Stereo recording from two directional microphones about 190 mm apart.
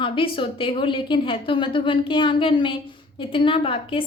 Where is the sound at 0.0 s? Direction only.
25° left (ahead or behind).